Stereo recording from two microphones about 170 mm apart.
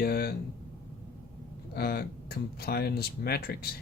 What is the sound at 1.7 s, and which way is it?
Speech, 65° left (ahead or behind).